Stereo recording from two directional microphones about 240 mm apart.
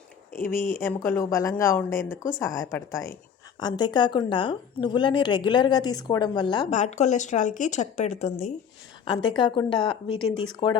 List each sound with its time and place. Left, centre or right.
0.3 s speech: centre
6.7 s speech: left
9.0 s speech: centre